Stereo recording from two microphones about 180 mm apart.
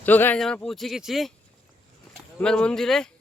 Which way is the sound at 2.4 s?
5° left (ahead or behind).